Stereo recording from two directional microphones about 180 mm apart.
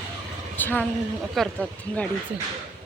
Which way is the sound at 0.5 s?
10° left (ahead or behind).